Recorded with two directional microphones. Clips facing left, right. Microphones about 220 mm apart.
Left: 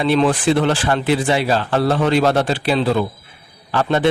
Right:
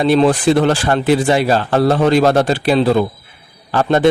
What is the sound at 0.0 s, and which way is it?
A man's voice, 40° right (ahead or behind).